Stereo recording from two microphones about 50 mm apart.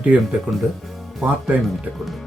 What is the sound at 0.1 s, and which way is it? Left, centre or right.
Speech, right.